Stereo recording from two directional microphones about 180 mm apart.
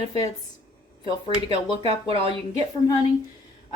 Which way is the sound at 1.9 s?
35° right (ahead or behind).